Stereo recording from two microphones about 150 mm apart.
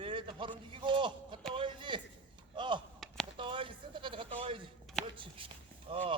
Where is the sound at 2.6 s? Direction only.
30° right (ahead or behind).